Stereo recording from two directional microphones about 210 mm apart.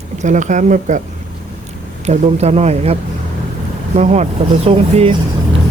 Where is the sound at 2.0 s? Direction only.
30° right (ahead or behind).